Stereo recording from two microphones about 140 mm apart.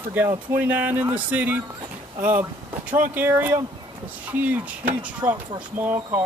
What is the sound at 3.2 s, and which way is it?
Speech, 15° right (ahead or behind).